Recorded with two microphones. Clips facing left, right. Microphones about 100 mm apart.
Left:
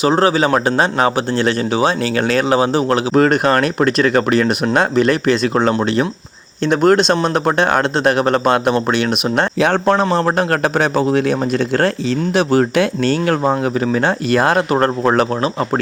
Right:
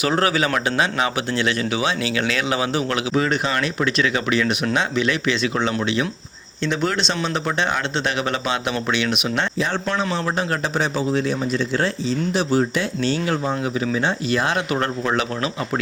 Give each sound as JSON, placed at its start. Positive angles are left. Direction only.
{"t": 0.0, "sound": "speech", "side_deg": 30}
{"t": 3.2, "sound": "speech", "side_deg": 55}
{"t": 9.6, "sound": "a man's voice", "side_deg": 65}
{"t": 9.8, "sound": "a man's voice", "side_deg": 45}